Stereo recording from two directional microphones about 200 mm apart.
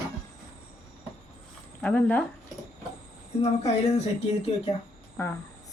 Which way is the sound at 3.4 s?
30° left (ahead or behind).